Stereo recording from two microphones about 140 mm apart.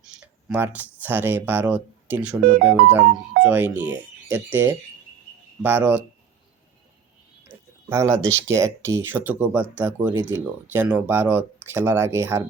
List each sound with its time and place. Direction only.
0.0 s speech: 5° right (ahead or behind)
7.4 s a sound: 20° right (ahead or behind)
8.4 s speech: 20° right (ahead or behind)